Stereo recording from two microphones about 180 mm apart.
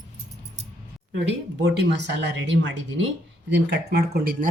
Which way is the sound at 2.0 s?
75° right (ahead or behind).